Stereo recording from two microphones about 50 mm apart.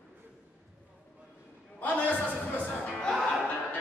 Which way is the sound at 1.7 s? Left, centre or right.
Left.